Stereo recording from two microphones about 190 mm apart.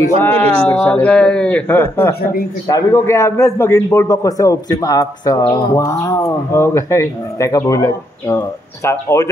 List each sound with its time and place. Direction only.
0.2 s speech: 10° left (ahead or behind)